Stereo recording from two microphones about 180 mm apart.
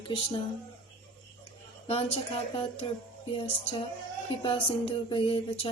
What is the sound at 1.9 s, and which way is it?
A woman's voice, 35° left (ahead or behind).